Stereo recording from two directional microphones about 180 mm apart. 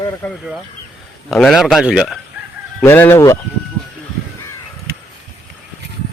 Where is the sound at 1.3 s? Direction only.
Centre (ahead or behind).